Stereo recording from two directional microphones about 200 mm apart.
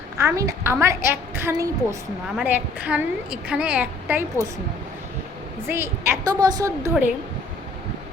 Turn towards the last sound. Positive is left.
turn(degrees=-15)  # may be behind; listen again after turning